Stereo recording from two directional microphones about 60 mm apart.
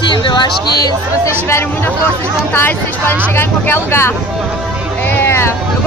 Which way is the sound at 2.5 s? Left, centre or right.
Left.